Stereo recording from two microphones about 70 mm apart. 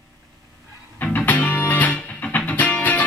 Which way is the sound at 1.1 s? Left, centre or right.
Left.